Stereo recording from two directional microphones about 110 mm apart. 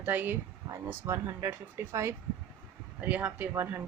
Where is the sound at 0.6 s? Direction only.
30° right (ahead or behind).